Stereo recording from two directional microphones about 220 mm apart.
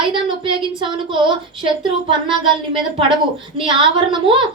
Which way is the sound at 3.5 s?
20° right (ahead or behind).